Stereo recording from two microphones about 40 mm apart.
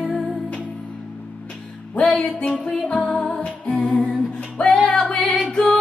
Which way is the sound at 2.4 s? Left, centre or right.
Left.